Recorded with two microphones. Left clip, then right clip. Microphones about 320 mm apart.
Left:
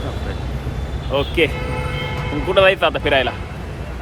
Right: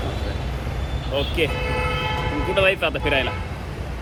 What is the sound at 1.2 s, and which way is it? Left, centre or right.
Speech, left.